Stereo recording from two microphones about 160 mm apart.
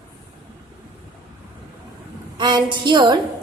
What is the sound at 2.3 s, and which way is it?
Speech, 30° right (ahead or behind).